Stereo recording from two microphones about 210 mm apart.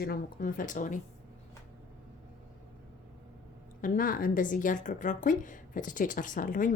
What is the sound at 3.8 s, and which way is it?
Speech, 40° left (ahead or behind).